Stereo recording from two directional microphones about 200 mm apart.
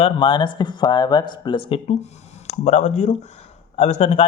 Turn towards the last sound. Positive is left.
turn(degrees=30)  # may be behind; listen again after turning